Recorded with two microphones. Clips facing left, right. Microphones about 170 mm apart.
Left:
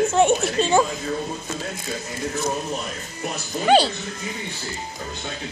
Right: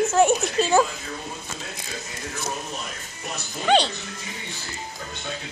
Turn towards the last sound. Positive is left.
turn(degrees=5)  # may be behind; listen again after turning